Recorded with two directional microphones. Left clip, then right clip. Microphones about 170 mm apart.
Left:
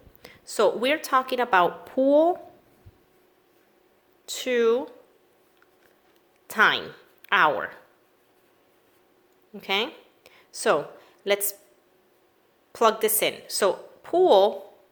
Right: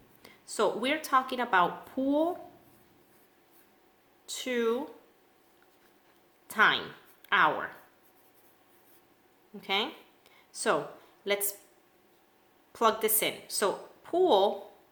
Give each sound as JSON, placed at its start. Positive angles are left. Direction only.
{"t": 0.2, "sound": "a woman's voice", "side_deg": 40}
{"t": 4.3, "sound": "speech", "side_deg": 40}
{"t": 6.5, "sound": "speech", "side_deg": 40}
{"t": 9.6, "sound": "a sound", "side_deg": 40}
{"t": 11.2, "sound": "a woman's voice", "side_deg": 40}
{"t": 12.7, "sound": "a woman's voice", "side_deg": 40}